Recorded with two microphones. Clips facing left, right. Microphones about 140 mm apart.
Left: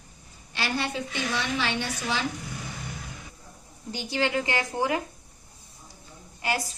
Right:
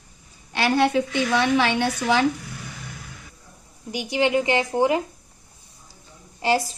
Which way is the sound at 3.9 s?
15° right (ahead or behind).